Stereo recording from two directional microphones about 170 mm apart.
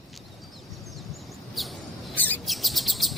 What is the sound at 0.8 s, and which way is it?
Bird vocalization, centre (ahead or behind).